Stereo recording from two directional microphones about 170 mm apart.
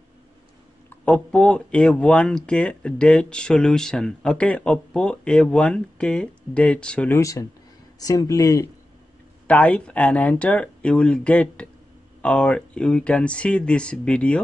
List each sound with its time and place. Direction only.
1.0 s speech: 5° left (ahead or behind)
9.5 s speech: 10° left (ahead or behind)